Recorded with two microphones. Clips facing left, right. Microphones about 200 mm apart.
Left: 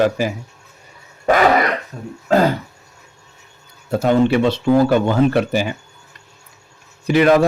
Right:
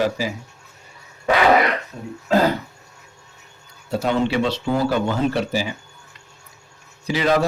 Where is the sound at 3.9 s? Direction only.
50° left (ahead or behind).